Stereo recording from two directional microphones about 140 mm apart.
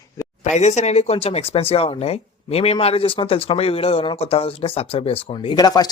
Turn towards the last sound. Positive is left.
turn(degrees=30)  # may be behind; listen again after turning